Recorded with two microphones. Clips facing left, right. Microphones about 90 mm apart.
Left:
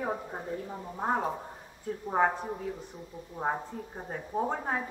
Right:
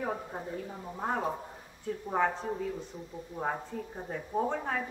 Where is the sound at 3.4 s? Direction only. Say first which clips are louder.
Left 2 dB; 20° left (ahead or behind).